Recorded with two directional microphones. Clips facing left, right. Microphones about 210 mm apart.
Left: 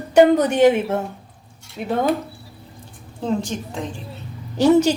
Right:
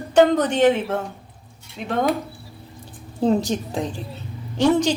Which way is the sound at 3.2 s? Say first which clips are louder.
Right 4 dB; 35° right (ahead or behind).